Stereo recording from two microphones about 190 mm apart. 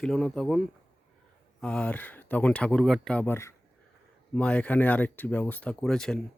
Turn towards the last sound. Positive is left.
turn(degrees=5)  # may be behind; listen again after turning